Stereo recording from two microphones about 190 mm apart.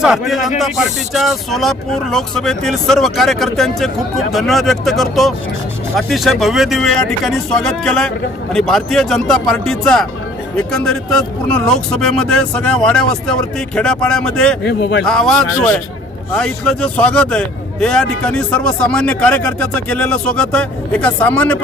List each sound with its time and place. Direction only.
0.0 s speech: centre (ahead or behind)
14.6 s speech: 60° left (ahead or behind)
15.0 s speech: 5° left (ahead or behind)